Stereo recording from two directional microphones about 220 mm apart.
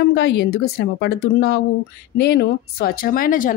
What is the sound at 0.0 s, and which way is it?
A woman's voice, 50° left (ahead or behind).